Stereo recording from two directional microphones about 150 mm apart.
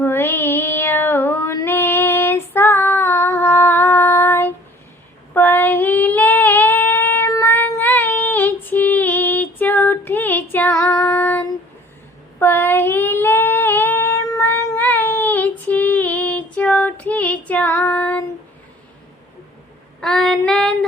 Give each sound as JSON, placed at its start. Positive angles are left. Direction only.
{"t": 0.0, "sound": "female singing", "side_deg": 15}
{"t": 12.4, "sound": "child singing", "side_deg": 15}
{"t": 20.0, "sound": "female singing", "side_deg": 5}